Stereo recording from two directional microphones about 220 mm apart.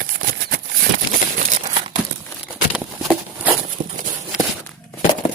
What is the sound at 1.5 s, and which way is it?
Crumpling, 30° right (ahead or behind).